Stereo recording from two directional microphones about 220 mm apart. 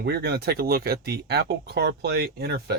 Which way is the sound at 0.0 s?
50° right (ahead or behind).